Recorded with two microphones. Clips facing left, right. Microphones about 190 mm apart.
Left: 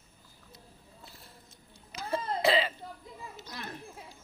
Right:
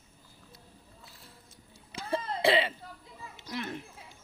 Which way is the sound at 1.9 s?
30° right (ahead or behind).